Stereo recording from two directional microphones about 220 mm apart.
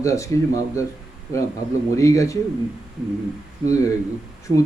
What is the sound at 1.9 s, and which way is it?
Speech, 15° left (ahead or behind).